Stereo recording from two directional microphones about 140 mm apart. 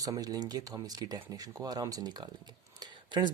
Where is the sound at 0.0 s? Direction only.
25° right (ahead or behind).